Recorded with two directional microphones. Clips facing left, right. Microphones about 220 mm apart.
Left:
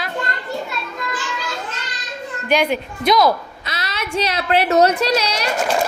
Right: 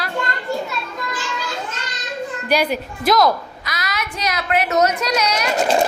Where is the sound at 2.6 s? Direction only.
Centre (ahead or behind).